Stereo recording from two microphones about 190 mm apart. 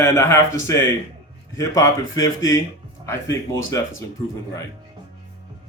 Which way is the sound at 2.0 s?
90° left.